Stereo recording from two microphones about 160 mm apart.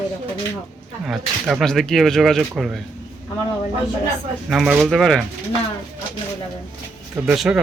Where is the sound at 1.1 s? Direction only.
Centre (ahead or behind).